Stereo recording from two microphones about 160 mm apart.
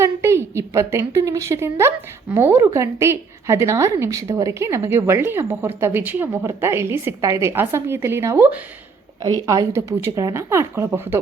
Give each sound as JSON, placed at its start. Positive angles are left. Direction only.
{"t": 0.0, "sound": "a woman's voice", "side_deg": -15}
{"t": 9.2, "sound": "a woman's voice", "side_deg": -25}